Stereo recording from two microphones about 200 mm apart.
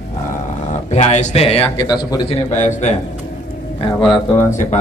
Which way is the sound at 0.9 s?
35° left (ahead or behind).